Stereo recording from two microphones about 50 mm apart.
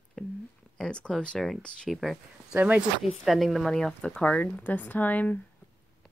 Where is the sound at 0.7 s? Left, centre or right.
Centre.